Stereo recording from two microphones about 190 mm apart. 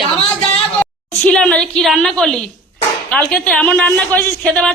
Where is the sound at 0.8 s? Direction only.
5° left (ahead or behind).